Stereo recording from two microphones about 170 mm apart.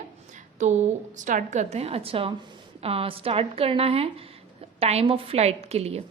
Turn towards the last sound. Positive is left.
turn(degrees=-40)  # may be behind; listen again after turning